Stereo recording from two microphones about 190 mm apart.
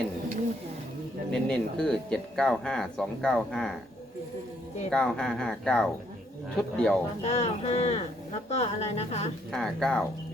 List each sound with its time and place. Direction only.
1.3 s speech: 5° left (ahead or behind)
4.9 s speech: 5° left (ahead or behind)
7.2 s a woman's voice: 35° left (ahead or behind)
9.5 s speech: 5° left (ahead or behind)